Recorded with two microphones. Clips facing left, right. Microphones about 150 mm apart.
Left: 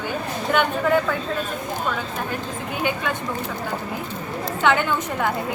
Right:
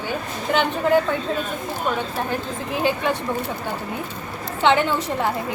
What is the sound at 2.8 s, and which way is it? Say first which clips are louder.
Speech: right 3 dB; 30° right (ahead or behind).